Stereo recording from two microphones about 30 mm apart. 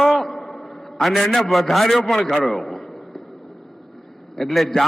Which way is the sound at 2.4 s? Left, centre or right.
Centre.